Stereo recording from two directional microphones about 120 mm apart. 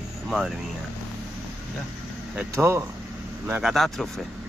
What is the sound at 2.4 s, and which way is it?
Speech, 20° right (ahead or behind).